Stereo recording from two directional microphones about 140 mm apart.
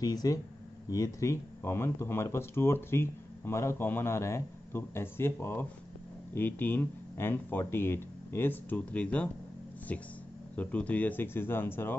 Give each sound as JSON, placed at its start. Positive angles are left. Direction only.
{"t": 0.0, "sound": "speech", "side_deg": 25}